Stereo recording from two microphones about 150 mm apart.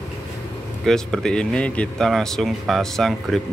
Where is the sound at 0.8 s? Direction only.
5° left (ahead or behind).